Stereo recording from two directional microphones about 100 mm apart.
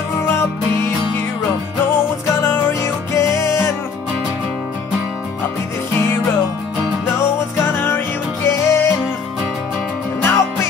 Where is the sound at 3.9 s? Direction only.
5° right (ahead or behind).